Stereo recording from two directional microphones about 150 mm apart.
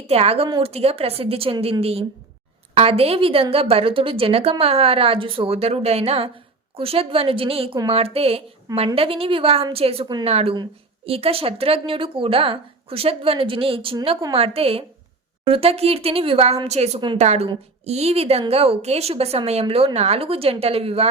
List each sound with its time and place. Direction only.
0.1 s a woman's voice: 40° right (ahead or behind)